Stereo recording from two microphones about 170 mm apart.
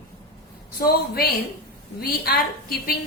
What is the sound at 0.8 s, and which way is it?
A woman's voice, 65° left (ahead or behind).